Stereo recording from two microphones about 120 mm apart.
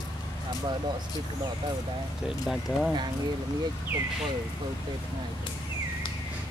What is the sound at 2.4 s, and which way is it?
Speech, centre (ahead or behind).